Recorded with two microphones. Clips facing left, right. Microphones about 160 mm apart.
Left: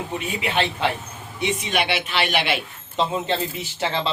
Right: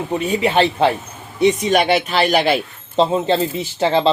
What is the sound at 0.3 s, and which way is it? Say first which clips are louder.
Speech: right 8 dB; 35° right (ahead or behind).